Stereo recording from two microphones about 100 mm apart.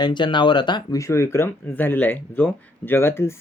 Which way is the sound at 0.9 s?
30° left (ahead or behind).